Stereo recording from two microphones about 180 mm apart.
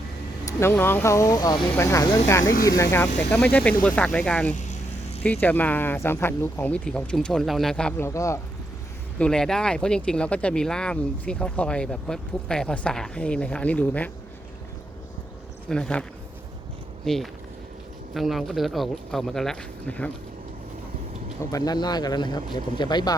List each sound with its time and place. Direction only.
0.4 s speech: 15° left (ahead or behind)
2.4 s speech: 50° left (ahead or behind)
2.6 s speech: 15° left (ahead or behind)
4.5 s vehicle: 40° left (ahead or behind)
5.2 s speech: 10° left (ahead or behind)
9.1 s speech: 5° left (ahead or behind)
15.7 s speech: 5° left (ahead or behind)
17.1 s speech: 5° left (ahead or behind)
21.5 s speech: 20° left (ahead or behind)